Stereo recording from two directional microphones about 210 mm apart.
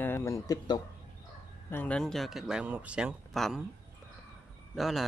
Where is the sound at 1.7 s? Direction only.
5° left (ahead or behind).